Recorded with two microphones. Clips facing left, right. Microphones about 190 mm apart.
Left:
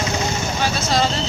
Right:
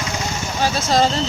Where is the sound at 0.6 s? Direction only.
45° right (ahead or behind).